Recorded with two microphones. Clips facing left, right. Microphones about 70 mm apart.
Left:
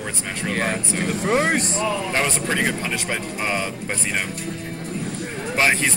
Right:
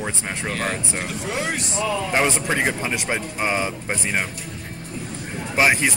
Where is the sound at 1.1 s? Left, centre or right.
Left.